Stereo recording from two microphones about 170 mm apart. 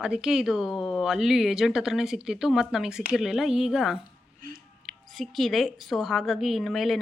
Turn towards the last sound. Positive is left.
turn(degrees=0)  # may be behind; listen again after turning